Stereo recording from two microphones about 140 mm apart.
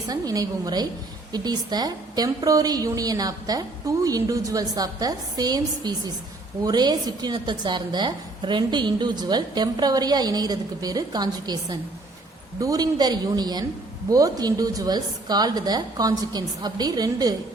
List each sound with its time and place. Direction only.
0.1 s a woman's voice: 25° right (ahead or behind)